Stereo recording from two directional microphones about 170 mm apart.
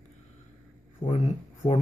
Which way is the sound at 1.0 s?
45° left (ahead or behind).